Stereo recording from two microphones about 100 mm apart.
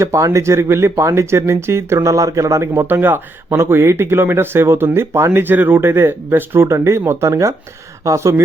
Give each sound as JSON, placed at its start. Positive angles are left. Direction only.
{"t": 0.0, "sound": "speech", "side_deg": -30}